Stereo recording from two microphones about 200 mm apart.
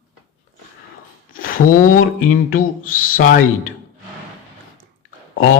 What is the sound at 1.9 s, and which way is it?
Speech, 45° left (ahead or behind).